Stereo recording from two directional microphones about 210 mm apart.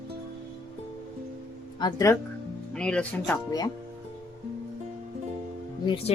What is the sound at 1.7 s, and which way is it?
Speech, 15° left (ahead or behind).